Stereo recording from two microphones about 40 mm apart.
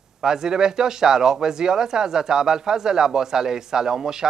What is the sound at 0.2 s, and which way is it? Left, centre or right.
Speech, centre.